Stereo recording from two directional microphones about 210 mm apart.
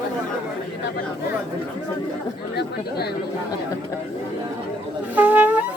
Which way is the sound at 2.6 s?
50° left (ahead or behind).